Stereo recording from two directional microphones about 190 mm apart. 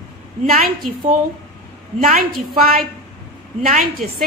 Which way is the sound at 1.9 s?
40° right (ahead or behind).